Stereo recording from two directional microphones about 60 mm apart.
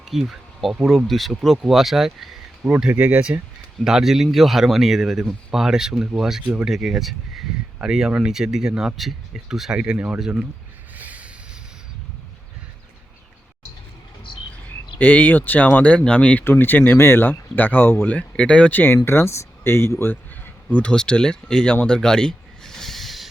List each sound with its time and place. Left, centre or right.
0.0 s speech: centre
2.9 s speech: right
3.8 s speech: centre
10.2 s speech: centre
10.9 s a sound: right
14.9 s speech: left
16.4 s speech: left; by 18.7 s centre
18.7 s speech: left
19.9 s a sound: left
20.9 s speech: centre